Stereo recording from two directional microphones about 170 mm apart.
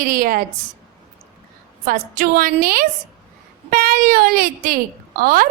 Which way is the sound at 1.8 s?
55° right (ahead or behind).